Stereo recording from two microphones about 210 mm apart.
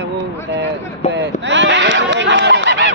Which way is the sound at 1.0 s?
30° left (ahead or behind).